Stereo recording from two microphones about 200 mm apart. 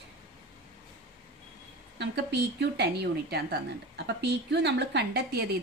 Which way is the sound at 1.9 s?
60° right (ahead or behind).